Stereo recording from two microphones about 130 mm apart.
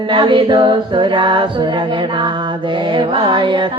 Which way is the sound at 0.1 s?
40° right (ahead or behind).